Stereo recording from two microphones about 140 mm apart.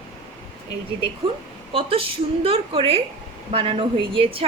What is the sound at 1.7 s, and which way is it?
A woman's voice, 40° right (ahead or behind).